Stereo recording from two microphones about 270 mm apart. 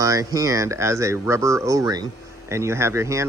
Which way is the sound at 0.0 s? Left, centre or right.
Centre.